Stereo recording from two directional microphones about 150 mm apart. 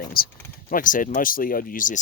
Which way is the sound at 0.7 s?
65° left (ahead or behind).